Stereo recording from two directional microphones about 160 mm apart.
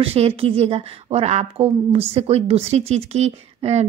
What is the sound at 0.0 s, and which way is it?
A woman's voice, 40° right (ahead or behind).